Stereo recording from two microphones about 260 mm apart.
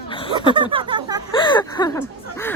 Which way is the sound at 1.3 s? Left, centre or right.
Centre.